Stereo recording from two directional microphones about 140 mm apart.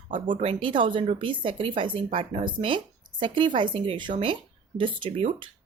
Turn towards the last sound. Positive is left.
turn(degrees=-40)  # may be behind; listen again after turning